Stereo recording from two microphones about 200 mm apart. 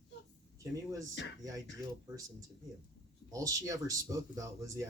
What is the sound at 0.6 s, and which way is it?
Speech, 15° right (ahead or behind).